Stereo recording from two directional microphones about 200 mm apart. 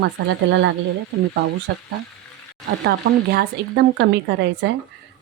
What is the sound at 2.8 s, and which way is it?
Speech, 55° right (ahead or behind).